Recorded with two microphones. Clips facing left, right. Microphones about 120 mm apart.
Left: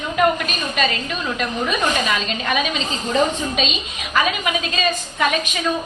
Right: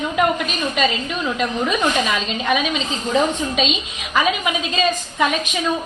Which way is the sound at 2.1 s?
15° right (ahead or behind).